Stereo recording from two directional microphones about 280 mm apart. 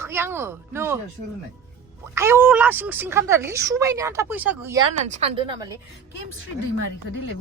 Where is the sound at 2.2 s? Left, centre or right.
Centre.